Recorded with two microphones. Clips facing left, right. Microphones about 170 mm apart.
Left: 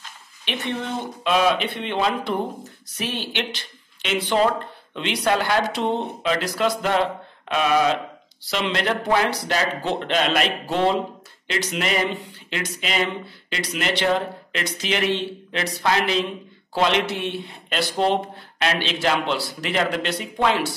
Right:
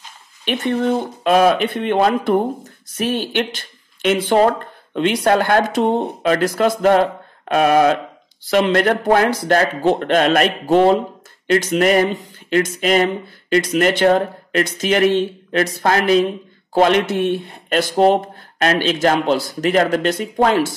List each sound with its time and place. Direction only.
0.5 s speech: 45° right (ahead or behind)